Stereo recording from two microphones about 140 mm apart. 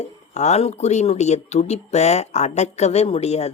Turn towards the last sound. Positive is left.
turn(degrees=50)  # may be behind; listen again after turning